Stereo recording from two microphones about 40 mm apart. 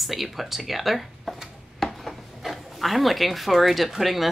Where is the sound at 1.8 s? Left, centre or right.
Centre.